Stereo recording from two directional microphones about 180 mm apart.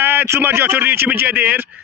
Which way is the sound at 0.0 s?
10° right (ahead or behind).